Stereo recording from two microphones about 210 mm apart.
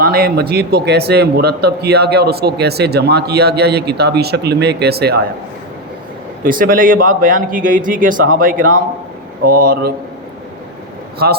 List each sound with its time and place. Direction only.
0.0 s a man's voice: 45° right (ahead or behind)
6.4 s a man's voice: 40° right (ahead or behind)
11.2 s a man's voice: 50° right (ahead or behind)